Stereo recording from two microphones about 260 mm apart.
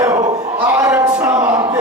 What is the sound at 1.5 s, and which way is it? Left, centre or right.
Chant, centre.